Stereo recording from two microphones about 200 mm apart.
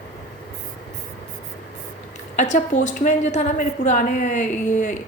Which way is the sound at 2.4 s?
35° left (ahead or behind).